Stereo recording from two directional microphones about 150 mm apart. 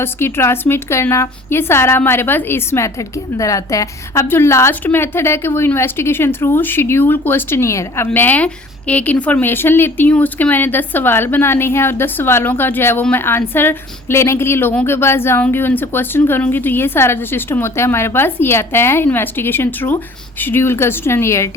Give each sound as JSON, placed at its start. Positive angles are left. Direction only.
{"t": 0.0, "sound": "speech", "side_deg": 15}